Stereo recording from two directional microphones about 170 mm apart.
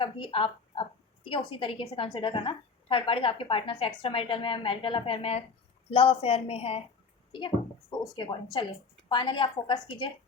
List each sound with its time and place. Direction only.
0.0 s a woman's voice: 30° left (ahead or behind)